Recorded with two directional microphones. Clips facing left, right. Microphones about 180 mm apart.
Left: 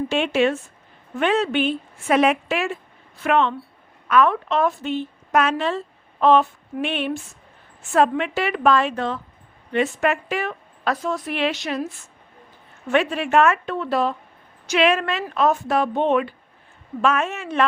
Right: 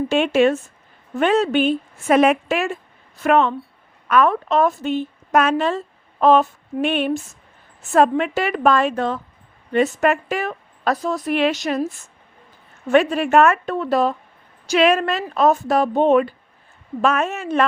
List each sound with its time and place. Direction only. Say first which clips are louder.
0.1 s a woman's voice: right 5 dB; 45° right (ahead or behind)
12.9 s a woman's voice: right 4 dB; 40° right (ahead or behind)